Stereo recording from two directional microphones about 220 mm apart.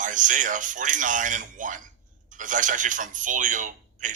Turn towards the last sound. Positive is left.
turn(degrees=-35)  # may be behind; listen again after turning